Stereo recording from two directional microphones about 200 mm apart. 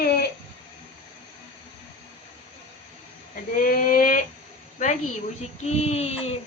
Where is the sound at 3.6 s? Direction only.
45° left (ahead or behind).